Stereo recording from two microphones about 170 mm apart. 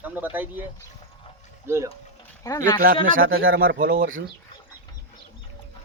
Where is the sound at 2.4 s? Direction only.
20° left (ahead or behind).